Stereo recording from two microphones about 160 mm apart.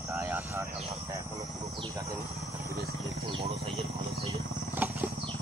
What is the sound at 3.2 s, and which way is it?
Speech, 35° right (ahead or behind).